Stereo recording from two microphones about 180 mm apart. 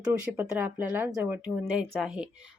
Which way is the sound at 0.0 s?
10° right (ahead or behind).